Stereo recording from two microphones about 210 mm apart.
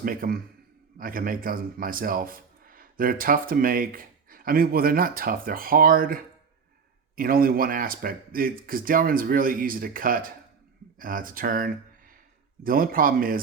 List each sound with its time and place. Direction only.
0.0 s speech: 45° right (ahead or behind)